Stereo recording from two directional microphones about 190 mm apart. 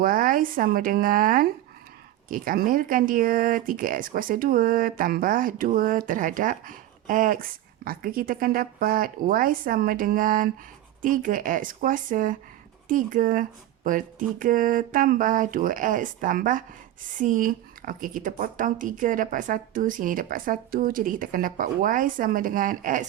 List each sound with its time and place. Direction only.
0.0 s speech: 50° right (ahead or behind)